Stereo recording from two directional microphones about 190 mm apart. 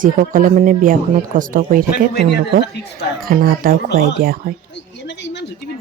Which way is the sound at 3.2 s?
50° right (ahead or behind).